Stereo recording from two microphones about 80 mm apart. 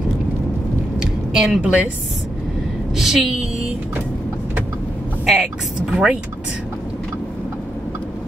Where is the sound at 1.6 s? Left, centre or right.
Centre.